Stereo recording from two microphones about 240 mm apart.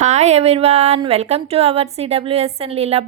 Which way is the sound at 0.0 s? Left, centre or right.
Right.